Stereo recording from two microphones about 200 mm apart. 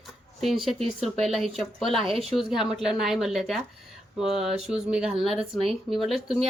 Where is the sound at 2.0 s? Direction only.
30° right (ahead or behind).